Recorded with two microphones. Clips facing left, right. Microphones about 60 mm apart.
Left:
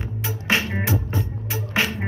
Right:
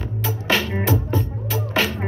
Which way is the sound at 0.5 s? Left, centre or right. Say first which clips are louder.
Right 2 dB; left.